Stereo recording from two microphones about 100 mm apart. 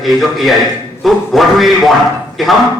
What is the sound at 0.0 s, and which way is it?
Speech, centre (ahead or behind).